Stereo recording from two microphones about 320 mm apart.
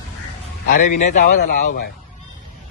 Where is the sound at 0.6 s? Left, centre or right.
Left.